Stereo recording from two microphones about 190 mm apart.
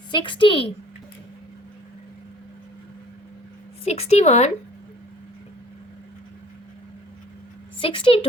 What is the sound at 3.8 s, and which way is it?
Speech, 35° left (ahead or behind).